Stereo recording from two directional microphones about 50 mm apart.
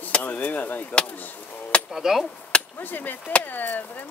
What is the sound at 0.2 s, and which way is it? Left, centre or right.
Speech, left.